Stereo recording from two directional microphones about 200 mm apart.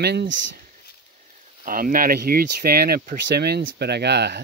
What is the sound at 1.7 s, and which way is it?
Speech, 45° right (ahead or behind).